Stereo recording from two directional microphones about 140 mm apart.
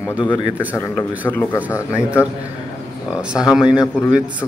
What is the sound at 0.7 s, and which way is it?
Speech, 15° left (ahead or behind).